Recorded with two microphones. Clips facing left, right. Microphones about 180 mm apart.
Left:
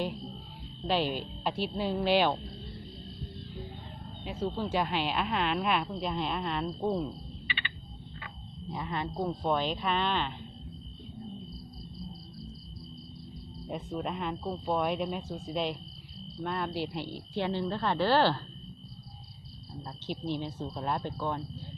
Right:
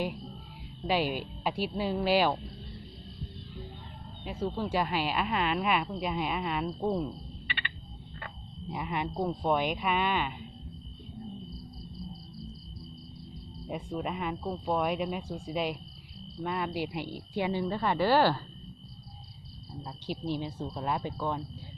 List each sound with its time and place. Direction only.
0.8 s speech: 10° right (ahead or behind)
4.2 s speech: 5° right (ahead or behind)
7.4 s a sound: 55° right (ahead or behind)
8.7 s speech: 15° right (ahead or behind)
13.7 s speech: 5° right (ahead or behind)
19.8 s speech: 5° right (ahead or behind)